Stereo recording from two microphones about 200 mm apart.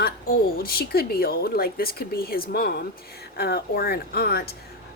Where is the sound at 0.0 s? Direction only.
50° left (ahead or behind).